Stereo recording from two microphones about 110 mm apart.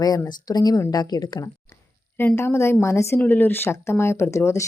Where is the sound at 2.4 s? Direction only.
25° left (ahead or behind).